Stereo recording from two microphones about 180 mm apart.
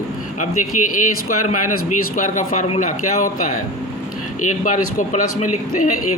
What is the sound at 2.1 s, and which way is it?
A man's voice, 45° left (ahead or behind).